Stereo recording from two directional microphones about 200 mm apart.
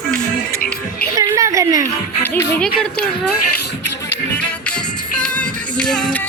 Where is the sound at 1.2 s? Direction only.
15° right (ahead or behind).